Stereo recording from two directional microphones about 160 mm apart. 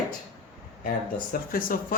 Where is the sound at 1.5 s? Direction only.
60° left (ahead or behind).